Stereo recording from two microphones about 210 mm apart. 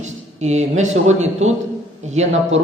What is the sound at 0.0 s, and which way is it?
A man's voice, 30° right (ahead or behind).